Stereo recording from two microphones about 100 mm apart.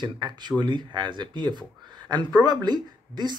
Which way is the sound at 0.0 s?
50° right (ahead or behind).